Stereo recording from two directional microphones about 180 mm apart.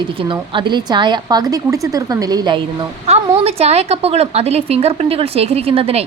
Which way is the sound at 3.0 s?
35° right (ahead or behind).